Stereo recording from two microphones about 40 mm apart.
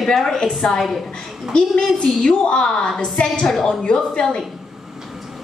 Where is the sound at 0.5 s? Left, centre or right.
Centre.